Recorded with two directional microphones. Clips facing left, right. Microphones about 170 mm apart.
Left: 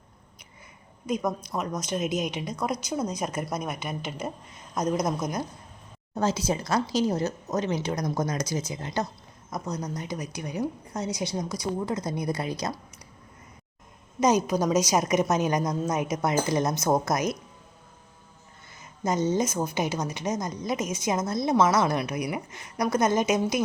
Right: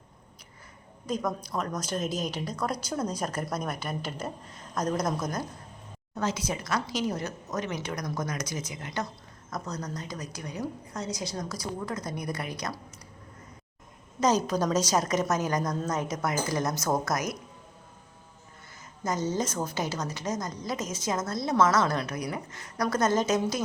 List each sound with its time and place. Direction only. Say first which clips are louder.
1.5 s a woman's voice: left 2 dB; 5° left (ahead or behind)
2.4 s a woman's voice: left 2 dB; 20° left (ahead or behind)
6.1 s a woman's voice: left 5 dB; 30° left (ahead or behind)
11.4 s speech: left 4 dB; centre (ahead or behind)
11.8 s a woman's voice: left 5 dB; 25° left (ahead or behind)
14.2 s a woman's voice: left 2 dB; 15° left (ahead or behind)
19.0 s a woman's voice: left 4 dB; 20° left (ahead or behind)